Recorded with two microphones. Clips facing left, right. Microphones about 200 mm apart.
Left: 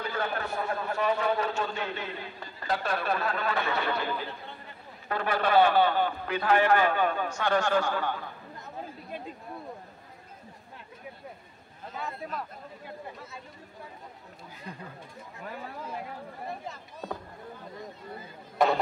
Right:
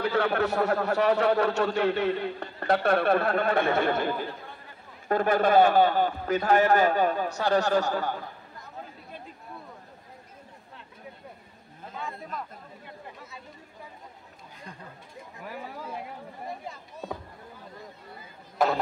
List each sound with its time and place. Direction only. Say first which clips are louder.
0.0 s a man's voice: right 7 dB; 70° right (ahead or behind); by 8.2 s 40° right (ahead or behind)
12.0 s speech: left 1 dB; 5° left (ahead or behind)
15.4 s speech: right 1 dB; 10° right (ahead or behind)
18.6 s speech: left 1 dB; centre (ahead or behind)